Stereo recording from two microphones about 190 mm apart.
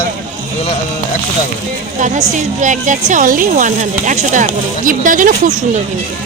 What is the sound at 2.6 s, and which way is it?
Speech, 40° right (ahead or behind).